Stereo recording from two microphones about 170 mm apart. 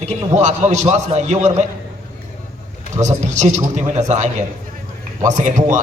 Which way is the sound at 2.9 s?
45° right (ahead or behind).